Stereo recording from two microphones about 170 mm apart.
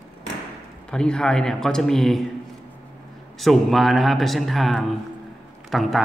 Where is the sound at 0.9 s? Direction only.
5° left (ahead or behind).